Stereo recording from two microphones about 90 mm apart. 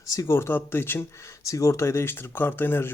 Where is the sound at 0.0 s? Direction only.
40° left (ahead or behind).